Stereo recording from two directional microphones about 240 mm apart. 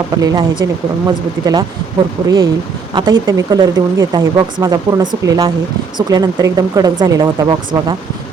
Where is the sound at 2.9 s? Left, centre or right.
Centre.